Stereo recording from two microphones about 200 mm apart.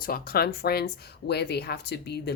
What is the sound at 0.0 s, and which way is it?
Speech, 50° left (ahead or behind).